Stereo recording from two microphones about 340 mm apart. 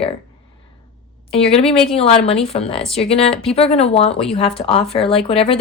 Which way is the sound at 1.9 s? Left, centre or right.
Centre.